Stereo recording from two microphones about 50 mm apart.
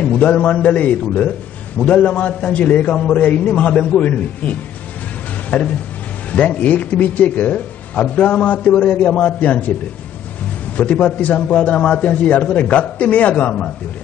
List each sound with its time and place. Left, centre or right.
0.0 s speech: left
10.8 s speech: left